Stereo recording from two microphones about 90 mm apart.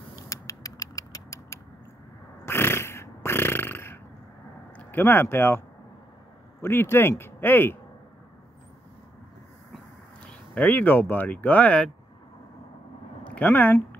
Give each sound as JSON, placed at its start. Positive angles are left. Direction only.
{"t": 0.1, "sound": "rodents", "side_deg": 35}
{"t": 2.4, "sound": "a sound", "side_deg": 25}
{"t": 4.7, "sound": "speech", "side_deg": 25}
{"t": 6.6, "sound": "speech", "side_deg": 25}
{"t": 10.2, "sound": "speech", "side_deg": 15}
{"t": 13.2, "sound": "speech", "side_deg": 15}